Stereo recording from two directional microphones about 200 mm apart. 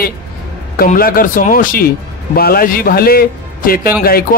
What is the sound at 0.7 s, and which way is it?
Speech, 45° left (ahead or behind).